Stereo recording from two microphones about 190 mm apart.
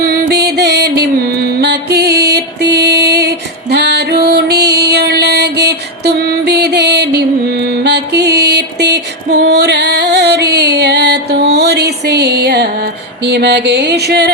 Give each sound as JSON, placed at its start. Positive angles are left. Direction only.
{"t": 0.1, "sound": "music", "side_deg": -60}